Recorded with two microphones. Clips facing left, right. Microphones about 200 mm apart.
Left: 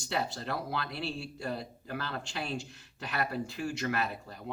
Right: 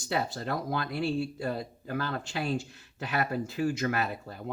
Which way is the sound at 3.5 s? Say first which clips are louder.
Right 7 dB; 45° right (ahead or behind).